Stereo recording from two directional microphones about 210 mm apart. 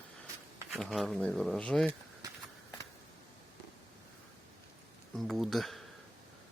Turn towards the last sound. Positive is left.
turn(degrees=0)  # may be behind; listen again after turning